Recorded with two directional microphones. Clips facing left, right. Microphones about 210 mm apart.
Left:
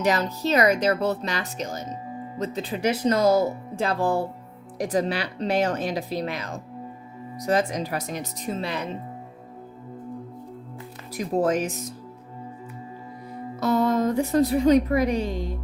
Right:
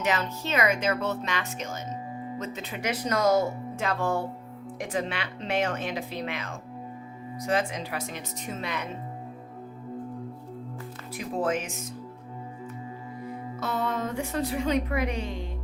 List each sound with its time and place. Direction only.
0.0 s speech: 35° left (ahead or behind)
11.1 s speech: 40° left (ahead or behind)
13.6 s a woman's voice: 40° left (ahead or behind)